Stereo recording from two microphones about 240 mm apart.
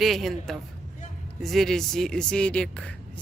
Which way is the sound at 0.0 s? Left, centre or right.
Centre.